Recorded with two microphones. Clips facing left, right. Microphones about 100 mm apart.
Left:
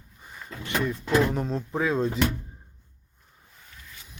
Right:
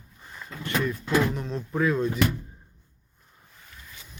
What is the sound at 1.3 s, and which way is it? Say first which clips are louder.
Speech: left 3 dB; 40° left (ahead or behind).